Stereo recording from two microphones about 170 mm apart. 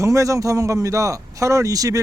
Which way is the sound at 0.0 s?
20° right (ahead or behind).